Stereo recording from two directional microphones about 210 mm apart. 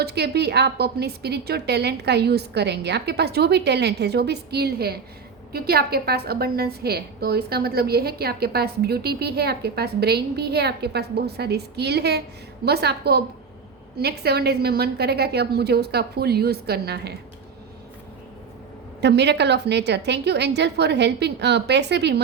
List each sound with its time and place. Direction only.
0.0 s a woman's voice: 50° right (ahead or behind)
19.0 s a woman's voice: 55° right (ahead or behind)